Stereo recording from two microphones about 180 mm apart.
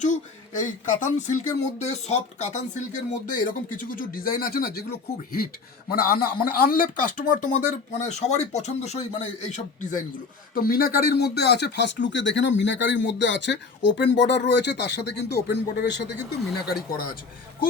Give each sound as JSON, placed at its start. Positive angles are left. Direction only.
{"t": 0.0, "sound": "speech", "side_deg": 45}
{"t": 10.5, "sound": "speech", "side_deg": 55}
{"t": 16.4, "sound": "speech", "side_deg": 0}